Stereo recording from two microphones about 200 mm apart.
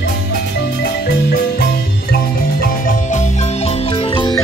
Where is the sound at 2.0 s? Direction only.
45° left (ahead or behind).